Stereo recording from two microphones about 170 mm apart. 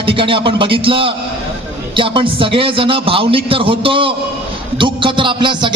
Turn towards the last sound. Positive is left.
turn(degrees=-30)  # may be behind; listen again after turning